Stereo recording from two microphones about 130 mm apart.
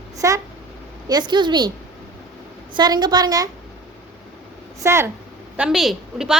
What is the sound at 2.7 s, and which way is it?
Speech, 35° right (ahead or behind).